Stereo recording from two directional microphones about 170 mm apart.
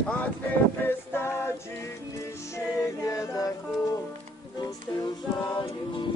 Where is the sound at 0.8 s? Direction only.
15° left (ahead or behind).